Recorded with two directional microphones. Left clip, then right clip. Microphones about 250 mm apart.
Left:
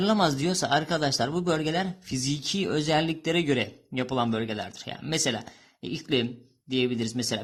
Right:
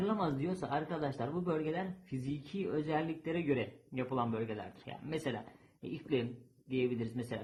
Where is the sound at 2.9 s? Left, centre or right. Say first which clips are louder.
Left 11 dB; left.